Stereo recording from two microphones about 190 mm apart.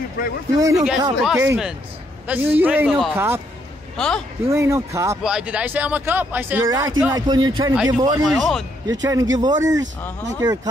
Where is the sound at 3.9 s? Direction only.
5° left (ahead or behind).